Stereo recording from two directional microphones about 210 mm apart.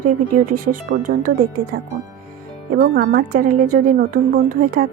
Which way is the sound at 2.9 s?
50° right (ahead or behind).